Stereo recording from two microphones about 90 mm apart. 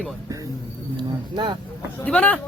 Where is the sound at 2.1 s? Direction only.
15° left (ahead or behind).